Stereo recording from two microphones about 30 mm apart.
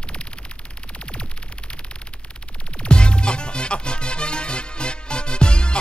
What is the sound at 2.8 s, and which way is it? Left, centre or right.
Music, left.